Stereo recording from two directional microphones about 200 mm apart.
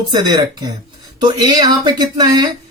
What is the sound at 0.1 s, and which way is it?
Speech, 20° right (ahead or behind).